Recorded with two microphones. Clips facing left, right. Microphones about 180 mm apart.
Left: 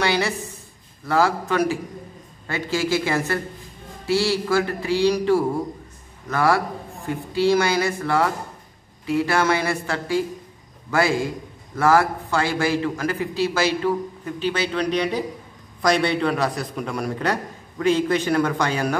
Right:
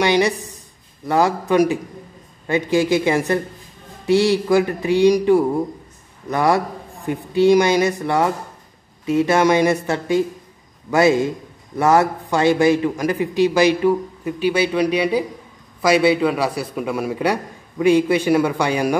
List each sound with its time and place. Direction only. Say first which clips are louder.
0.0 s a man's voice: right 5 dB; 15° right (ahead or behind)